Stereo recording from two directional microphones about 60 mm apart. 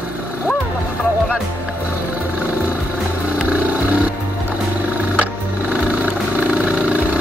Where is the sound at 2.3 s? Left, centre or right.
Right.